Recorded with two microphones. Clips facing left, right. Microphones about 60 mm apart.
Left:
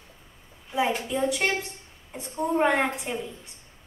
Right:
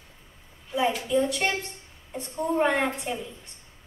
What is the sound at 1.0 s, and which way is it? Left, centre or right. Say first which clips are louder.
A woman's voice: right 1 dB; centre.